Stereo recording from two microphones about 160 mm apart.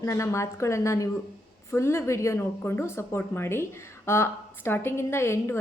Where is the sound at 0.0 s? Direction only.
20° left (ahead or behind).